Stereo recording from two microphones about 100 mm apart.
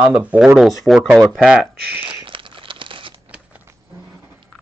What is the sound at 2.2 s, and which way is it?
Crumpling, 60° right (ahead or behind).